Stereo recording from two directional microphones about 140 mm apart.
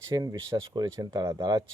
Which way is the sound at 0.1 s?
25° right (ahead or behind).